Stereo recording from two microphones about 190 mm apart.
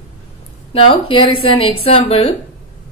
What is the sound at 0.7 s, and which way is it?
A woman's voice, 30° left (ahead or behind).